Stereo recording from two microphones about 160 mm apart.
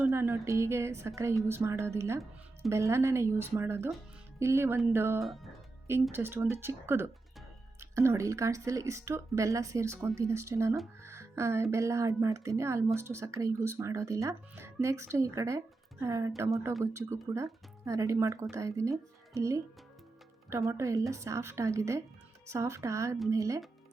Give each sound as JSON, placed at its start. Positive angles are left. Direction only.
{"t": 0.0, "sound": "a sound", "side_deg": -15}
{"t": 0.4, "sound": "speech", "side_deg": -15}
{"t": 5.2, "sound": "speech", "side_deg": 0}
{"t": 5.9, "sound": "speech", "side_deg": -15}